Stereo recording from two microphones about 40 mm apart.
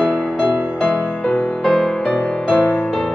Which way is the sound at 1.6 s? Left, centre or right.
Centre.